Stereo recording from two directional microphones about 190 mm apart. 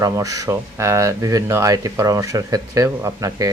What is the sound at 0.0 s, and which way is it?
Speech, 20° right (ahead or behind).